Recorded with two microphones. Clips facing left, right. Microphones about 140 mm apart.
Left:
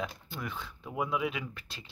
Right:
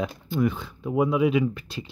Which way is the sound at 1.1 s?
10° right (ahead or behind).